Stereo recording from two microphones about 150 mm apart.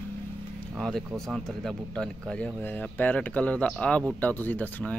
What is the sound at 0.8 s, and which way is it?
Speech, centre (ahead or behind).